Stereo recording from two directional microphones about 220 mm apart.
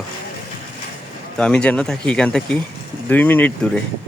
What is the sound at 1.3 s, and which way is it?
Speech, 5° left (ahead or behind).